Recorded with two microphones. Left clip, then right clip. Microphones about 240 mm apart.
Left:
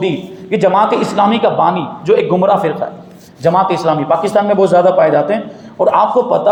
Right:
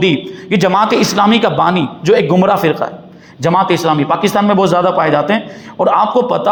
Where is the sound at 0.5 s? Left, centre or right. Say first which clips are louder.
Even; right.